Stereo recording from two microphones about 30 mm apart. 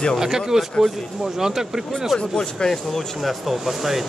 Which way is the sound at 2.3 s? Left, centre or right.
Left.